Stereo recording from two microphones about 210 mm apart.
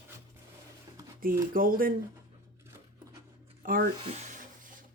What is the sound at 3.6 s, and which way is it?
Speech, 45° right (ahead or behind).